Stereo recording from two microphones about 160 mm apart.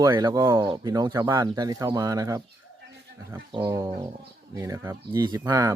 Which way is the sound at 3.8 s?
25° right (ahead or behind).